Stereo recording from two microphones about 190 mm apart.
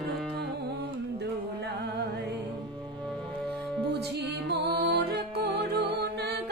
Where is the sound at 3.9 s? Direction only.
60° right (ahead or behind).